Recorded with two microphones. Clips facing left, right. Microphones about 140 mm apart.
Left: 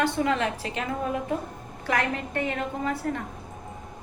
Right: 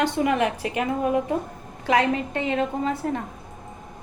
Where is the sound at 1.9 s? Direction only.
20° right (ahead or behind).